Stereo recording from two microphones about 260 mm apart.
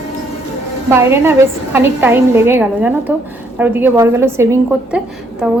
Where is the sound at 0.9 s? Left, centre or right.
Centre.